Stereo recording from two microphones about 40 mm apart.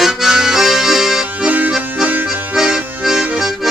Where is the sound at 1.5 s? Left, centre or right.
Right.